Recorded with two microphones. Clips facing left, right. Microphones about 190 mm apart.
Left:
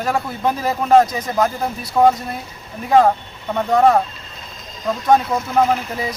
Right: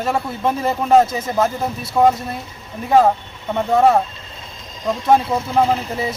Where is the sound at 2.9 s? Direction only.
5° right (ahead or behind).